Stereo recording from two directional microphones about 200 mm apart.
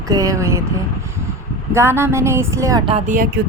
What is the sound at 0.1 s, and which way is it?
Speech, 15° right (ahead or behind).